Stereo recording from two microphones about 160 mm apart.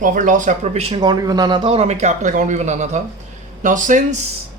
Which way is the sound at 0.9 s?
25° right (ahead or behind).